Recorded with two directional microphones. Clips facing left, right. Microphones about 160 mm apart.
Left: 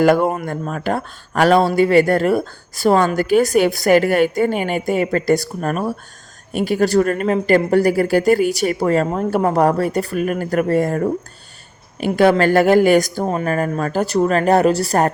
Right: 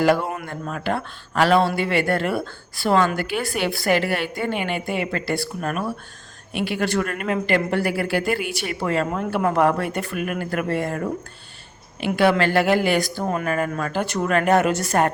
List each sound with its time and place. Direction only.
0.0 s speech: 50° left (ahead or behind)
13.2 s speech: 35° left (ahead or behind)